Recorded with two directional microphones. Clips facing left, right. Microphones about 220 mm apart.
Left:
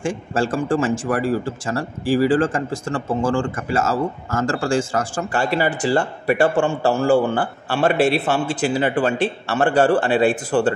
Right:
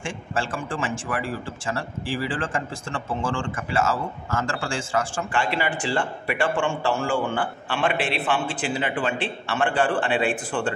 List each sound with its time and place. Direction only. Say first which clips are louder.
0.0 s speech: left 7 dB; 40° left (ahead or behind)